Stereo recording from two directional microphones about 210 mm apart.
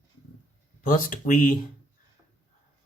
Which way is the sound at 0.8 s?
40° left (ahead or behind).